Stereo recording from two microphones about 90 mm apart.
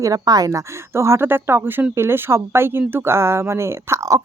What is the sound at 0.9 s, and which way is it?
Speech, 30° right (ahead or behind).